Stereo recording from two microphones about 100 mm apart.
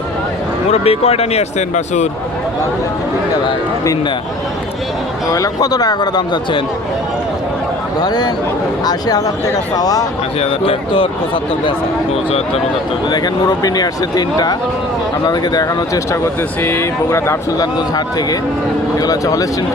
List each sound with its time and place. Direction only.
0.7 s speech: 90° left
5.3 s speech: 35° left (ahead or behind)
8.0 s speech: 40° left (ahead or behind)
10.4 s speech: 65° left (ahead or behind)
13.1 s speech: 40° left (ahead or behind)
16.2 s speech: 25° left (ahead or behind)
17.7 s speech: 40° left (ahead or behind)